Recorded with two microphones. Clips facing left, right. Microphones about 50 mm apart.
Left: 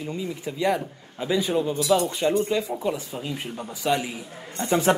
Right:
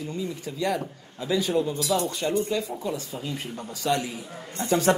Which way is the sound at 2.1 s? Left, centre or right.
Left.